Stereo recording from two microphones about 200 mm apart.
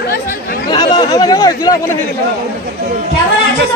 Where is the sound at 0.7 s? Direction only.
20° left (ahead or behind).